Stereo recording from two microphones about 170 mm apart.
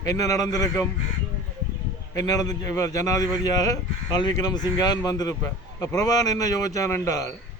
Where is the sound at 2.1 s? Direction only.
20° left (ahead or behind).